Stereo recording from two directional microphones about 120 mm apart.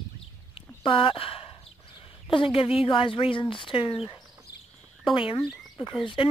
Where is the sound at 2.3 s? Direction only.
50° left (ahead or behind).